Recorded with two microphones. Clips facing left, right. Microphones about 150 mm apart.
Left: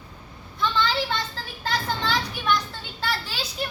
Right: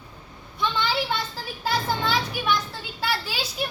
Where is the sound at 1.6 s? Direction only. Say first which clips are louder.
Right 2 dB; 10° right (ahead or behind).